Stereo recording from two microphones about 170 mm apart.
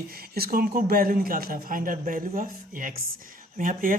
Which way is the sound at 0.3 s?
60° right (ahead or behind).